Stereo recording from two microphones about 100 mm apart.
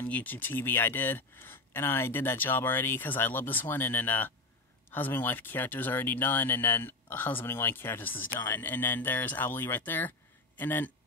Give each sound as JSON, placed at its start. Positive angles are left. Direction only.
{"t": 0.0, "sound": "speech", "side_deg": 15}